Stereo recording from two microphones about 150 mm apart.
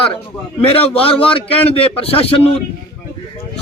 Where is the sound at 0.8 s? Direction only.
40° left (ahead or behind).